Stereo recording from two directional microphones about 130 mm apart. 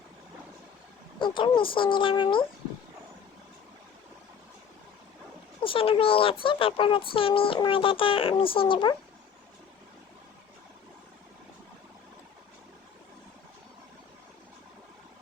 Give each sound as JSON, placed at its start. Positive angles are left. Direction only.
{"t": 1.2, "sound": "speech", "side_deg": 40}
{"t": 5.6, "sound": "a child's voice", "side_deg": 45}